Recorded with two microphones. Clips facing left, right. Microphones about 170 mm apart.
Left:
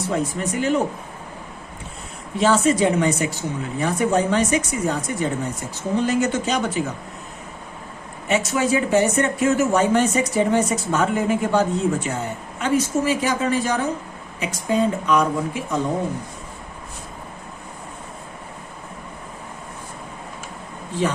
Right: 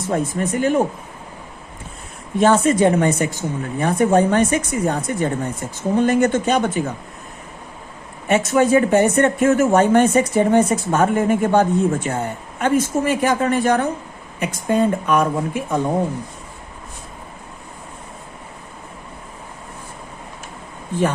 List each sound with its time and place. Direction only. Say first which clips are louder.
0.1 s speech: right 5 dB; 50° right (ahead or behind)
2.4 s speech: right 3 dB; 50° right (ahead or behind)
8.3 s speech: right 5 dB; 55° right (ahead or behind)